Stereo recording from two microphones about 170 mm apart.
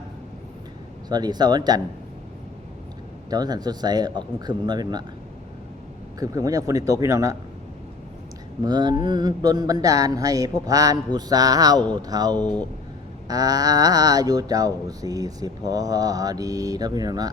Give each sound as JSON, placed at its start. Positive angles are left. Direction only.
{"t": 1.1, "sound": "speech", "side_deg": -25}
{"t": 3.2, "sound": "speech", "side_deg": -25}
{"t": 6.1, "sound": "speech", "side_deg": -20}
{"t": 8.6, "sound": "speech", "side_deg": -25}